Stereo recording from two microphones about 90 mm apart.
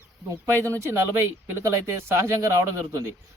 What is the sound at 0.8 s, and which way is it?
Speech, 30° right (ahead or behind).